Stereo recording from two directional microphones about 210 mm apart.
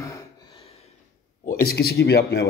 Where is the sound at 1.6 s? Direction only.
50° left (ahead or behind).